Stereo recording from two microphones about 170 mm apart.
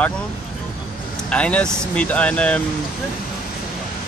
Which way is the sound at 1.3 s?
5° left (ahead or behind).